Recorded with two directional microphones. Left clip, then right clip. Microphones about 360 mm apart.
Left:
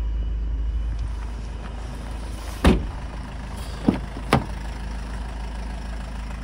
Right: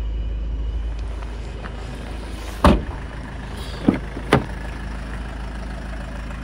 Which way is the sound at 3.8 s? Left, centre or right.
Left.